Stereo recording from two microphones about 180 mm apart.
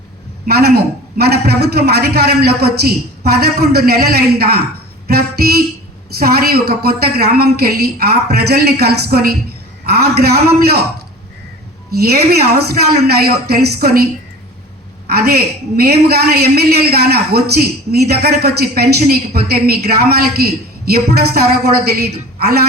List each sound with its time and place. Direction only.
0.4 s a man's voice: 60° right (ahead or behind)
5.0 s music: 60° right (ahead or behind)
6.1 s a man's voice: 60° right (ahead or behind)
11.9 s a man's voice: 60° right (ahead or behind)
15.1 s a man's voice: 60° right (ahead or behind)